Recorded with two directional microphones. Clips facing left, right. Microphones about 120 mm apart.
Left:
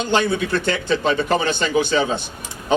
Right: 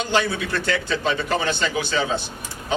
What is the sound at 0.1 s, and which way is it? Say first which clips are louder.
Speech: left 5 dB; 20° left (ahead or behind).